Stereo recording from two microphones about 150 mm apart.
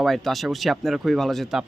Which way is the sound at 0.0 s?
Centre (ahead or behind).